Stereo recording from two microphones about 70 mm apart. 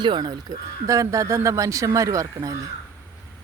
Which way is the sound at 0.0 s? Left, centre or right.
Right.